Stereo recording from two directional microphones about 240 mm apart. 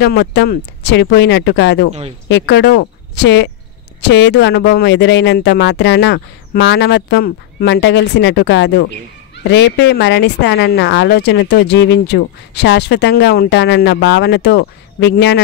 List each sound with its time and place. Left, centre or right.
0.0 s speech: left
4.1 s speech: left